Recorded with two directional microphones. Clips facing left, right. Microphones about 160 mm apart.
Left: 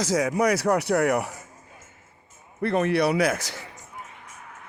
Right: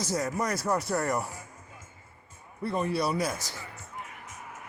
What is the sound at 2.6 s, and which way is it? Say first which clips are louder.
A man's voice: left 7 dB; 75° left (ahead or behind).